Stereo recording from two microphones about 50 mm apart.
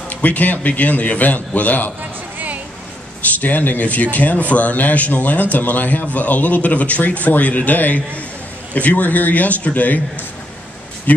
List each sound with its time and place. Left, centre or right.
0.1 s speech: left
2.3 s a sound: right
3.2 s speech: left
11.1 s speech: left